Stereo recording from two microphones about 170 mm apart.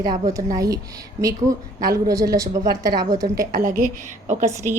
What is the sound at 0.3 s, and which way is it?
A woman's voice, 20° right (ahead or behind).